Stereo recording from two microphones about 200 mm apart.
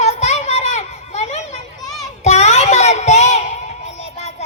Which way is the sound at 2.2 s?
35° left (ahead or behind).